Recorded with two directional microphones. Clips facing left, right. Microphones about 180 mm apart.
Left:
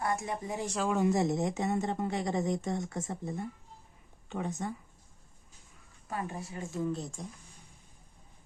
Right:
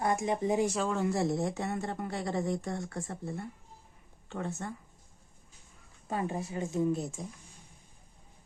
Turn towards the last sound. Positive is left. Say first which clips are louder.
# right 4 dB
turn(degrees=-5)  # may be behind; listen again after turning